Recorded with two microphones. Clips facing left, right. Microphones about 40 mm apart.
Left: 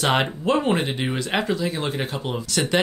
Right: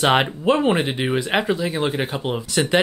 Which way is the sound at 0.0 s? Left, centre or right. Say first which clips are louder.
Right 4 dB; centre.